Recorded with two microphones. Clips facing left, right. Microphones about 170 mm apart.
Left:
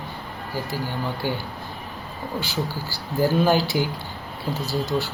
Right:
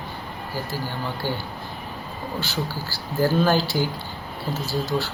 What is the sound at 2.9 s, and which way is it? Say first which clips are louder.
Speech: even; 15° left (ahead or behind).